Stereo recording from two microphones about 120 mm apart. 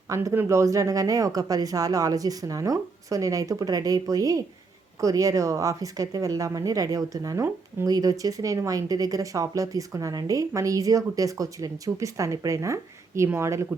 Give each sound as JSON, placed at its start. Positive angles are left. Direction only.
{"t": 0.1, "sound": "speech", "side_deg": -25}